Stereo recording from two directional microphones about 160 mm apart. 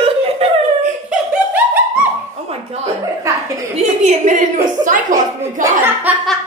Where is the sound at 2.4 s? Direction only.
40° right (ahead or behind).